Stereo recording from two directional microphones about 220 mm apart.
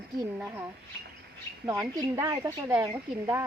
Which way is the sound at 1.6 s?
15° right (ahead or behind).